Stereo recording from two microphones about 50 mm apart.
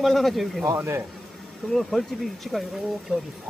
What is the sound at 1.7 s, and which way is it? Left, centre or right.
Speech, centre.